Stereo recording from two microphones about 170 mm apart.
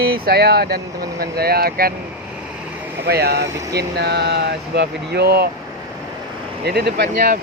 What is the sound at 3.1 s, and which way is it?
Speech, 70° right (ahead or behind).